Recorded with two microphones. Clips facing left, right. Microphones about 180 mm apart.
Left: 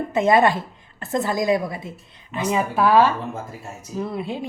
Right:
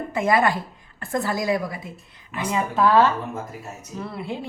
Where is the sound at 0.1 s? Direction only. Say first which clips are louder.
Left 3 dB; 25° left (ahead or behind).